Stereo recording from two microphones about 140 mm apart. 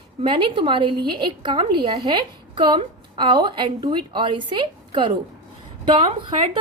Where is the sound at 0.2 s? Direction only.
35° right (ahead or behind).